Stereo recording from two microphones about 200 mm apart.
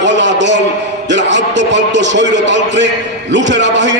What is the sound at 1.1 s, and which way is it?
A man's voice, 60° right (ahead or behind).